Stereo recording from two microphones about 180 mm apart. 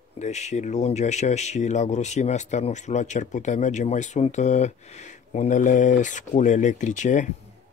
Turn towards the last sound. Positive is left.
turn(degrees=45)  # may be behind; listen again after turning